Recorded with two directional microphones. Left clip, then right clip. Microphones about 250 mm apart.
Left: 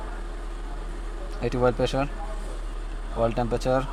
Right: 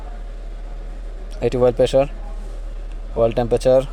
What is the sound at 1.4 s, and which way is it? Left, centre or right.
Speech, right.